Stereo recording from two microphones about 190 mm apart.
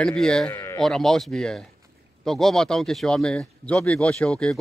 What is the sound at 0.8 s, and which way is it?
Speech, centre (ahead or behind).